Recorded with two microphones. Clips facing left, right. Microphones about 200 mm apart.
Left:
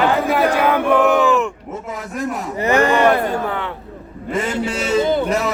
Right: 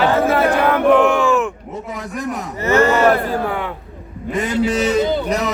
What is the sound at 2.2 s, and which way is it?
Speech, 15° right (ahead or behind).